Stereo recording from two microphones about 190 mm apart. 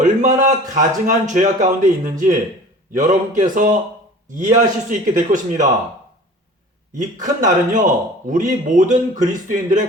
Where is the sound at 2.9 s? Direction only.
40° right (ahead or behind).